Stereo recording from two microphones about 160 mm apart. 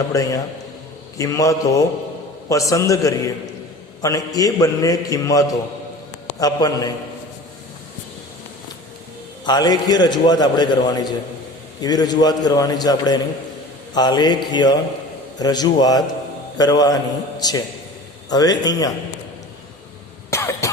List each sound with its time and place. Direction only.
0.1 s a man's voice: 20° left (ahead or behind)
9.4 s a man's voice: 25° left (ahead or behind)
20.3 s cough: 20° left (ahead or behind)